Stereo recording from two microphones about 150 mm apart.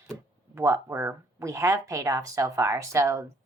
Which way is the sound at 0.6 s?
15° right (ahead or behind).